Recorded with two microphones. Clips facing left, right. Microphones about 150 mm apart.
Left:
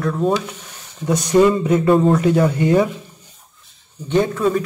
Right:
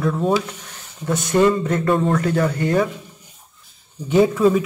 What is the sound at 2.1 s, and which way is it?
Speech, 20° left (ahead or behind).